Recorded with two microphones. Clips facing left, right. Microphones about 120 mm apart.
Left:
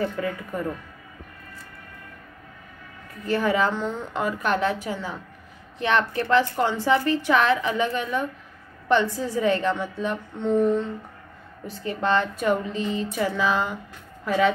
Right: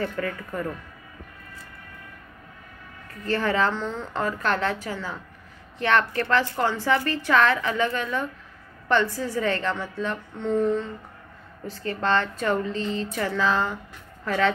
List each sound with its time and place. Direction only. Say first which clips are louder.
0.0 s a woman's voice: left 2 dB; 15° left (ahead or behind)
3.3 s a woman's voice: left 1 dB; 15° left (ahead or behind)